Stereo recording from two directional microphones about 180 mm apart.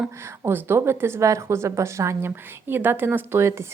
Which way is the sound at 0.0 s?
15° right (ahead or behind).